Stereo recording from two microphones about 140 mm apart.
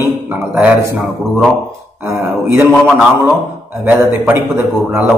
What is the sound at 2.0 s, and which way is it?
Speech, 20° right (ahead or behind).